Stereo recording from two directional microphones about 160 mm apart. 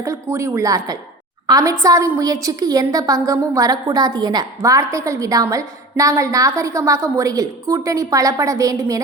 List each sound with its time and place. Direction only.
0.0 s a woman's voice: 20° right (ahead or behind)